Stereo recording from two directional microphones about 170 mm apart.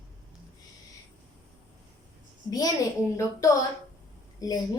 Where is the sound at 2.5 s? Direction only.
20° left (ahead or behind).